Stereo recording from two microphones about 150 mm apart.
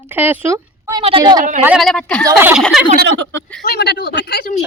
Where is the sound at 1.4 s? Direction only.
55° right (ahead or behind).